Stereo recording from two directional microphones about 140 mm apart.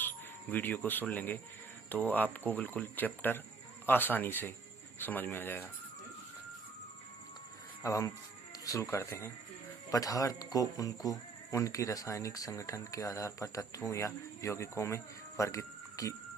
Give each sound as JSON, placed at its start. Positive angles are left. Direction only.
{"t": 0.5, "sound": "speech", "side_deg": 10}
{"t": 7.8, "sound": "speech", "side_deg": 25}